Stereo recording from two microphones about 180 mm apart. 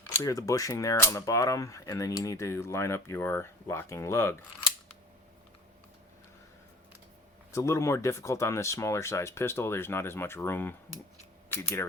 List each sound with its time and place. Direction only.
0.1 s speech: 15° left (ahead or behind)
7.5 s speech: 15° left (ahead or behind)